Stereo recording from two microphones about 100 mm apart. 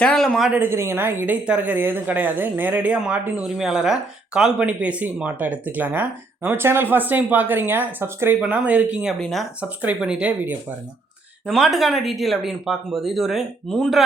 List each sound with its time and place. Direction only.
0.0 s speech: 10° left (ahead or behind)
0.5 s speech: 25° right (ahead or behind)
9.2 s speech: centre (ahead or behind)
9.6 s speech: 15° right (ahead or behind)
11.4 s speech: centre (ahead or behind)